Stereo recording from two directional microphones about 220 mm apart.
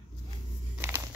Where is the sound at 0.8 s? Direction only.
10° right (ahead or behind).